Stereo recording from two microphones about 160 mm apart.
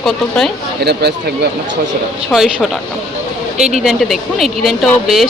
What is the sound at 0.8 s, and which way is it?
Speech, 90° right.